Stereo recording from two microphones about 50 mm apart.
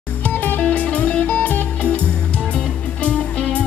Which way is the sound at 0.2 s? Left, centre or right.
Left.